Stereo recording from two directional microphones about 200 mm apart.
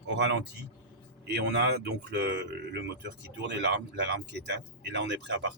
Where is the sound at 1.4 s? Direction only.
60° right (ahead or behind).